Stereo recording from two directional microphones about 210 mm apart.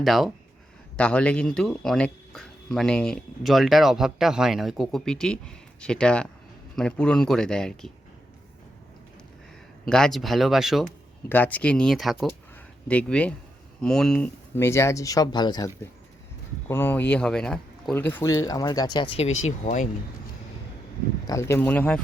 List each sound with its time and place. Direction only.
0.0 s speech: centre (ahead or behind)
9.8 s speech: centre (ahead or behind); by 19.0 s 20° left (ahead or behind)
19.5 s speech: 35° left (ahead or behind)
21.2 s speech: 15° left (ahead or behind)